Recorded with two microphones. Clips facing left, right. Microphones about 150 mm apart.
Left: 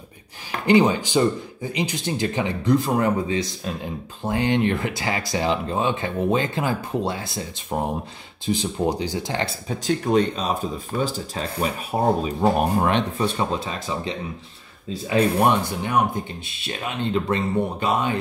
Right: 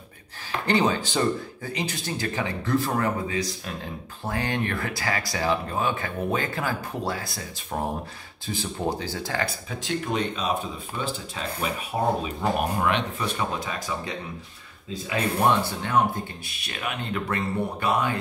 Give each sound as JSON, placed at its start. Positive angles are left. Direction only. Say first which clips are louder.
{"t": 0.7, "sound": "speech", "louder": "left 6 dB", "side_deg": 15}
{"t": 9.8, "sound": "speech", "louder": "left 7 dB", "side_deg": 40}
{"t": 15.4, "sound": "speech", "louder": "left 2 dB", "side_deg": 15}